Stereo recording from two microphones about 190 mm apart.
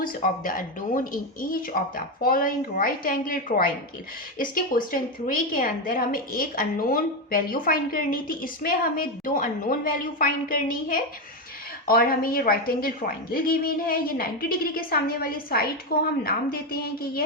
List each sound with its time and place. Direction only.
0.0 s a woman's voice: 45° left (ahead or behind)